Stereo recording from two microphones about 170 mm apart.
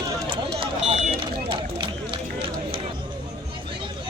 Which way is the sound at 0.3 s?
30° right (ahead or behind).